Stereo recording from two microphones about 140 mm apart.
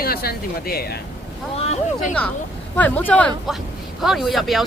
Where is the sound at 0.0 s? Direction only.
90° left.